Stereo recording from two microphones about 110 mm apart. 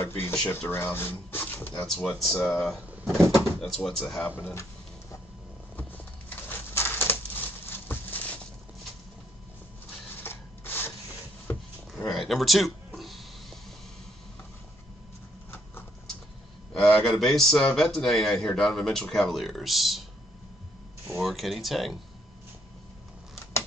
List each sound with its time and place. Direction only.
0.0 s speech: 20° left (ahead or behind); by 4.0 s 5° left (ahead or behind)
5.8 s a sound: 15° left (ahead or behind)
10.2 s rub: 20° left (ahead or behind)
12.0 s a sound: centre (ahead or behind)
16.7 s speech: 5° left (ahead or behind)
21.1 s speech: centre (ahead or behind)